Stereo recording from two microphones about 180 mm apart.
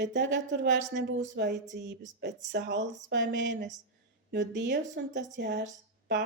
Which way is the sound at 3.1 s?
85° right.